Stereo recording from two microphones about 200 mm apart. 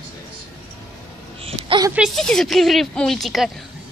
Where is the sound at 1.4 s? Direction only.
25° right (ahead or behind).